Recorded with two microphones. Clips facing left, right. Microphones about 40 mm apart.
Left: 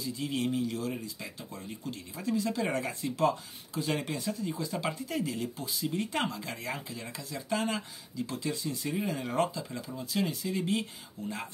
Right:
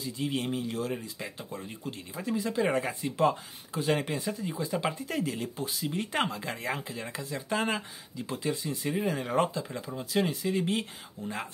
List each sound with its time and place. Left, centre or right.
0.0 s speech: right
5.0 s speech: right